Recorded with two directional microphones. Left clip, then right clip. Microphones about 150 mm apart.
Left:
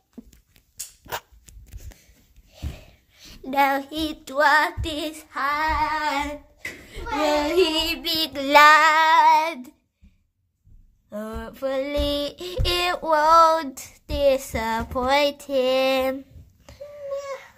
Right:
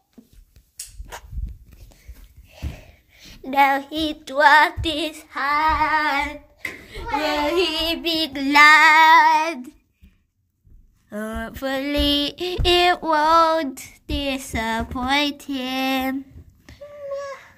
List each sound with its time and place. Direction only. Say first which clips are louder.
0.2 s a sound: left 5 dB; 25° left (ahead or behind)
1.1 s a sound: left 7 dB; 65° left (ahead or behind)
2.7 s a sound: right 2 dB; 10° left (ahead or behind)
3.9 s female singing: right 3 dB; centre (ahead or behind)
4.5 s female singing: right 6 dB; 10° right (ahead or behind)
5.3 s speech: right 2 dB; 15° left (ahead or behind)
5.6 s female singing: right 5 dB; 5° left (ahead or behind)
5.9 s female singing: right 4 dB; 10° right (ahead or behind); by 8.1 s 10° left (ahead or behind)
8.1 s child singing: left 3 dB; 20° left (ahead or behind)
8.7 s female singing: right 4 dB; centre (ahead or behind)
11.1 s female singing: right 3 dB; 5° right (ahead or behind)
13.3 s speech: left 2 dB; 15° left (ahead or behind)